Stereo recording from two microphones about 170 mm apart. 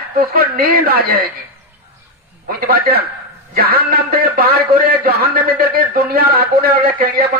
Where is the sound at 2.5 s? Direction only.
65° right (ahead or behind).